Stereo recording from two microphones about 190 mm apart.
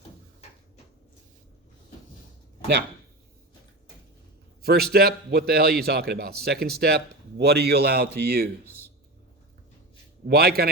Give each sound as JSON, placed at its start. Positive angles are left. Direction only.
{"t": 4.6, "sound": "a man's voice", "side_deg": -55}
{"t": 10.2, "sound": "a man's voice", "side_deg": -55}